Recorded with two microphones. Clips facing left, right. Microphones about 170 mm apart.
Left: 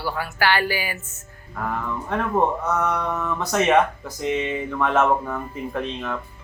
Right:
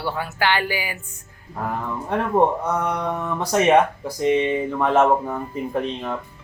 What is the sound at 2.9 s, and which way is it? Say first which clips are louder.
Speech: right 1 dB; 30° right (ahead or behind).